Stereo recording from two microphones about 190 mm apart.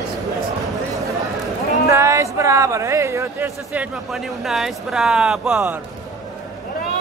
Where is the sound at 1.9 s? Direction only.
15° right (ahead or behind).